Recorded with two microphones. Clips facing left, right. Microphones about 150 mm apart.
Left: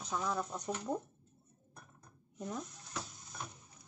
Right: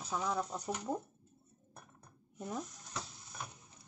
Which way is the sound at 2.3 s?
5° right (ahead or behind).